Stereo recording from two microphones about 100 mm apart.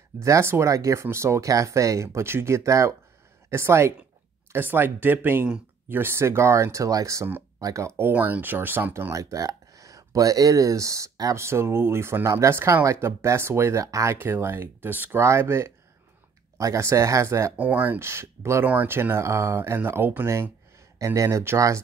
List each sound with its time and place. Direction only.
0.2 s speech: 30° right (ahead or behind)
8.1 s speech: 20° right (ahead or behind)
9.1 s speech: 35° right (ahead or behind)
14.1 s speech: 20° right (ahead or behind)
17.6 s speech: 15° right (ahead or behind)